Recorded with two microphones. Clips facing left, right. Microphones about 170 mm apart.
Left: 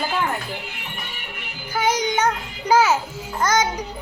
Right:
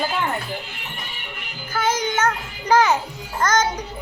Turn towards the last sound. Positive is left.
turn(degrees=10)  # may be behind; listen again after turning